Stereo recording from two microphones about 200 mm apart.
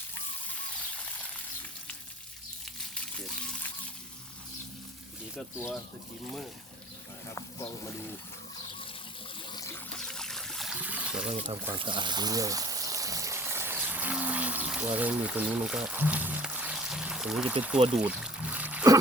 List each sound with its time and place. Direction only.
5.4 s speech: 10° left (ahead or behind)
9.5 s trickle: 15° left (ahead or behind)
10.0 s trickle: 5° left (ahead or behind)
11.8 s a sound: 25° right (ahead or behind); by 17.7 s 5° right (ahead or behind)
17.9 s trickle: 5° right (ahead or behind)